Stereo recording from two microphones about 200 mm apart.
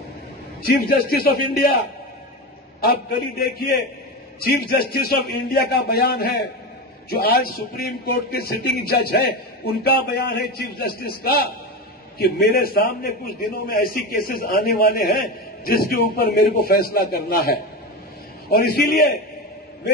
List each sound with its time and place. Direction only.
0.7 s a man's voice: 50° left (ahead or behind)
3.3 s a man's voice: 50° left (ahead or behind)